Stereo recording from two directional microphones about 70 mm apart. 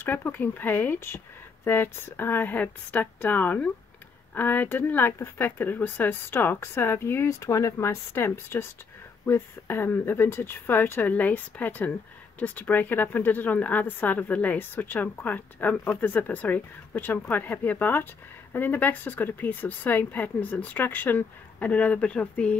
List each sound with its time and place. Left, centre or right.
0.0 s a woman's voice: left
7.2 s a woman's voice: left; by 22.6 s centre